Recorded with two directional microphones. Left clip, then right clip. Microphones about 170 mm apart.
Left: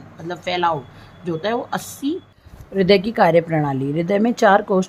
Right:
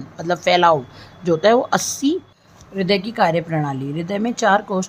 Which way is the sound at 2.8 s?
25° left (ahead or behind).